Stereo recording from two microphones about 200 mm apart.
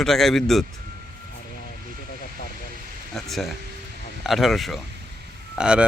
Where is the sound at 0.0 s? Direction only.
Centre (ahead or behind).